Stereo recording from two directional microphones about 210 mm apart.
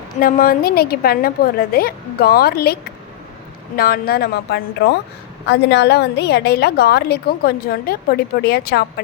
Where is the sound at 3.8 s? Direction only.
45° left (ahead or behind).